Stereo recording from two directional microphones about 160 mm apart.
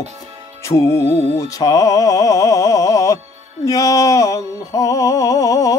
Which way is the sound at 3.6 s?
20° left (ahead or behind).